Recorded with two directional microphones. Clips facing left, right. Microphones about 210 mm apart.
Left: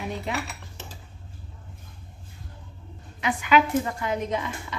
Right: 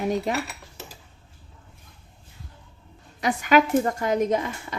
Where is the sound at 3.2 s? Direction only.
40° right (ahead or behind).